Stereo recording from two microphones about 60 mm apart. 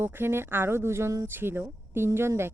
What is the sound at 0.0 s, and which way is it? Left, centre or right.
Speech, right.